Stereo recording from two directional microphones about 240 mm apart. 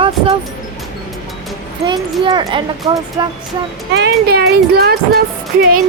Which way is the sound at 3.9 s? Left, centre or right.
Right.